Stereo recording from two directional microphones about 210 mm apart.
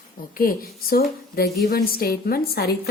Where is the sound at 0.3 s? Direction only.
45° left (ahead or behind).